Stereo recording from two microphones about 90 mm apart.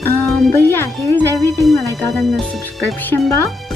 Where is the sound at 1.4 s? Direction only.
Centre (ahead or behind).